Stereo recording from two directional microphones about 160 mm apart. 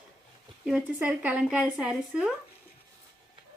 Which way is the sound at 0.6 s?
5° right (ahead or behind).